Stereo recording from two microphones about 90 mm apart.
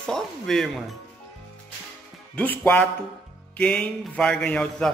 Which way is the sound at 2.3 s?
15° left (ahead or behind).